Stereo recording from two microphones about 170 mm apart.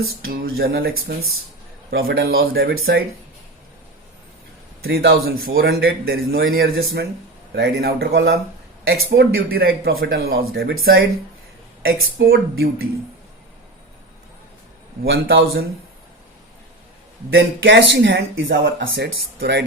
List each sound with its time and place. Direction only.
0.3 s speech: 60° right (ahead or behind)
4.8 s speech: 65° right (ahead or behind)
15.1 s speech: 70° right (ahead or behind)
17.3 s speech: 90° right